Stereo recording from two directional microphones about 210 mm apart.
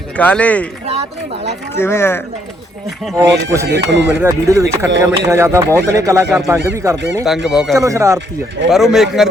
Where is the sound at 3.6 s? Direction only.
55° right (ahead or behind).